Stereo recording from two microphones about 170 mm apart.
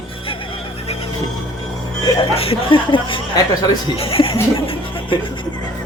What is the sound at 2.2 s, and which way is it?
Speech, 35° left (ahead or behind).